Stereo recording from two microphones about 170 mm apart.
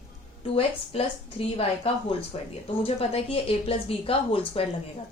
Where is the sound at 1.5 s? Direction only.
35° left (ahead or behind).